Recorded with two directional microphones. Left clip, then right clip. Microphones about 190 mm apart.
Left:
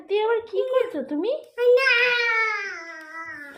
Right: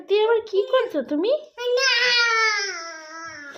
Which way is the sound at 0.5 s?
35° right (ahead or behind).